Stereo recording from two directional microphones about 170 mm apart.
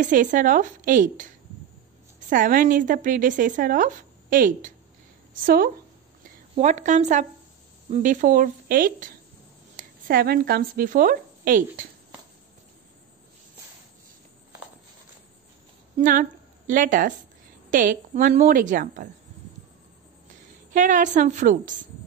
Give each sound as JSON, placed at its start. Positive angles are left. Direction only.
{"t": 0.0, "sound": "a woman's voice", "side_deg": -50}
{"t": 6.5, "sound": "a woman's voice", "side_deg": -45}
{"t": 16.0, "sound": "a woman's voice", "side_deg": -50}
{"t": 20.7, "sound": "a woman's voice", "side_deg": -50}